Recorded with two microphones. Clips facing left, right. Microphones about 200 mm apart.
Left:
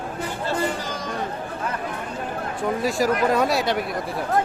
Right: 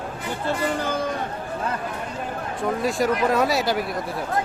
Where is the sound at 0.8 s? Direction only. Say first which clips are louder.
Right 6 dB; 55° right (ahead or behind).